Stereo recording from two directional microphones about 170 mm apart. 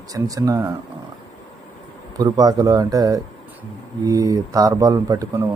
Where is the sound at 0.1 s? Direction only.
20° right (ahead or behind).